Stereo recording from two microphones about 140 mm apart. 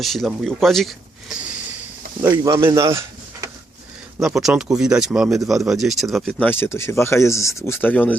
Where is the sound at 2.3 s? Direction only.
30° right (ahead or behind).